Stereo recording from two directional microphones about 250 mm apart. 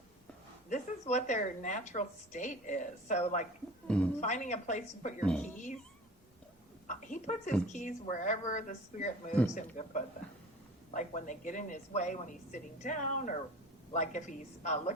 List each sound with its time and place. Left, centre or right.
0.7 s a woman's voice: left
3.8 s speech: centre
4.2 s a woman's voice: left
5.2 s speech: centre
6.8 s a woman's voice: left
9.3 s speech: centre
9.6 s a woman's voice: left